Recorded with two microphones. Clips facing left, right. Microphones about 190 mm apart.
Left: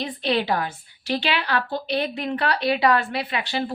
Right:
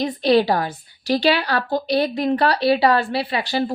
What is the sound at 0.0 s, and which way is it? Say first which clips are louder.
Speech: right 7 dB; 40° right (ahead or behind).